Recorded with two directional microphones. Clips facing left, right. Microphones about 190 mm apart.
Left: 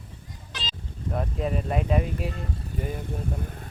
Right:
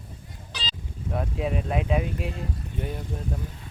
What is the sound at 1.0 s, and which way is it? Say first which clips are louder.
Speech: even; centre (ahead or behind).